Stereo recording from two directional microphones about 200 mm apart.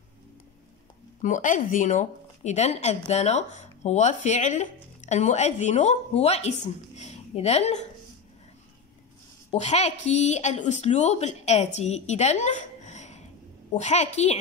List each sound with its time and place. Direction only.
1.2 s speech: 40° left (ahead or behind)
9.5 s speech: 35° left (ahead or behind)